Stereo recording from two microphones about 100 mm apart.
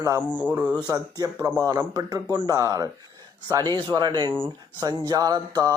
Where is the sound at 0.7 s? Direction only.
40° right (ahead or behind).